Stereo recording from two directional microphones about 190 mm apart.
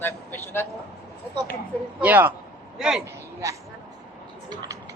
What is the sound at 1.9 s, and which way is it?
Speech, 10° right (ahead or behind).